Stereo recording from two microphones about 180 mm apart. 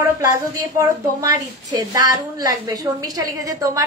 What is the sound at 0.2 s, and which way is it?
A woman's voice, 20° right (ahead or behind).